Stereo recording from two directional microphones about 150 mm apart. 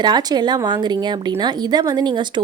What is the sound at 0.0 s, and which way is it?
Speech, 25° right (ahead or behind).